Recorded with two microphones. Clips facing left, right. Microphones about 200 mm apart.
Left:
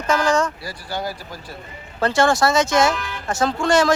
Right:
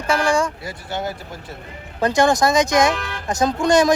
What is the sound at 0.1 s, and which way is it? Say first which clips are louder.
Speech: even; 10° right (ahead or behind).